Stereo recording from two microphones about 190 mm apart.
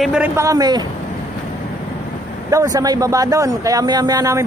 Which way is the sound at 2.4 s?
15° right (ahead or behind).